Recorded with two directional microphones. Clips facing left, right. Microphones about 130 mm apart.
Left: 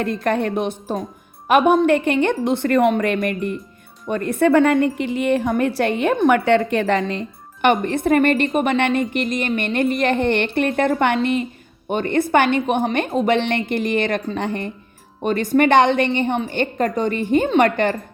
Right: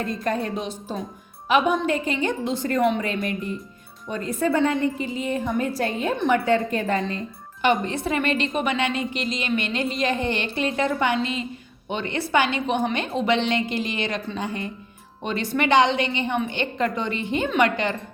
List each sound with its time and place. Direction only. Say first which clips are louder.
0.0 s a woman's voice: left 5 dB; 70° left (ahead or behind); by 17.9 s 50° left (ahead or behind)